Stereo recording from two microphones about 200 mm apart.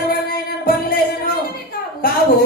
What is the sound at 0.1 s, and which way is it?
Music, 45° left (ahead or behind).